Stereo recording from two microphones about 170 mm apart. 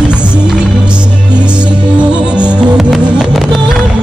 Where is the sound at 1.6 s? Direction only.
25° right (ahead or behind).